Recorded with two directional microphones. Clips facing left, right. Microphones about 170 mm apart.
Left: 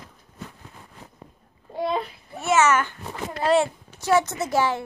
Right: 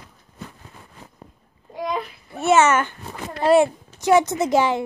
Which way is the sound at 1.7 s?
30° left (ahead or behind).